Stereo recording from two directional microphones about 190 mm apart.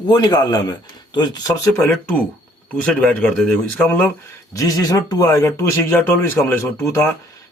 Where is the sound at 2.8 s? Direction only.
5° left (ahead or behind).